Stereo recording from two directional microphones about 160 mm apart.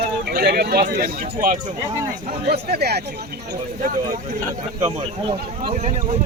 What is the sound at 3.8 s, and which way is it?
Speech, 60° right (ahead or behind).